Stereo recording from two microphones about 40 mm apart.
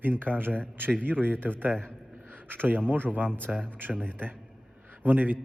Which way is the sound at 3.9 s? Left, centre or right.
Left.